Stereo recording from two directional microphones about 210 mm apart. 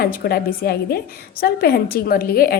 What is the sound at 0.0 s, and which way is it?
A woman's voice, 45° left (ahead or behind).